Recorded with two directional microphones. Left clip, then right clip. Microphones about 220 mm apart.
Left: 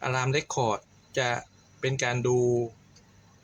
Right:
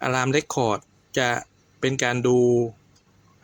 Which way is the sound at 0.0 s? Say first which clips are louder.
Right 5 dB; 40° right (ahead or behind).